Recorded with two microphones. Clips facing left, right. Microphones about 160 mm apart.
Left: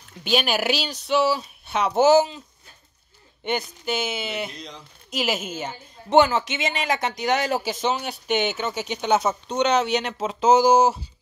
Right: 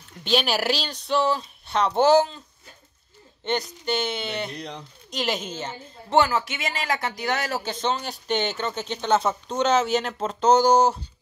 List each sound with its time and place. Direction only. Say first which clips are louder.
0.2 s speech: even; 5° left (ahead or behind)
3.4 s speech: even; 5° left (ahead or behind)
4.6 s speech: right 4 dB; 65° right (ahead or behind)
5.1 s a woman's voice: left 1 dB; 5° left (ahead or behind)